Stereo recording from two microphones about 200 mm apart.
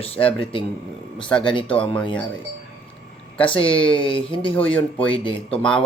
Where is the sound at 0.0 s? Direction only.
30° left (ahead or behind).